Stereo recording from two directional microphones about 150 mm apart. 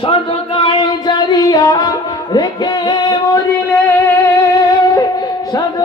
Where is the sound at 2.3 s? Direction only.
30° left (ahead or behind).